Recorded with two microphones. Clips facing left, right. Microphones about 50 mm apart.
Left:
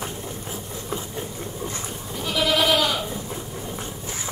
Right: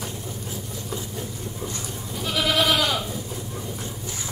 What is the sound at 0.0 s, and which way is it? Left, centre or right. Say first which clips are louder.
Engine: left 2 dB; left.